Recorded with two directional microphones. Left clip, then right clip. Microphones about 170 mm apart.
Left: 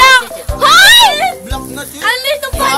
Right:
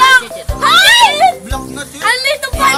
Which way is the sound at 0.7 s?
65° left (ahead or behind).